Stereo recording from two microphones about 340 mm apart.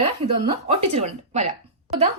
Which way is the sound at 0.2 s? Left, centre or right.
Right.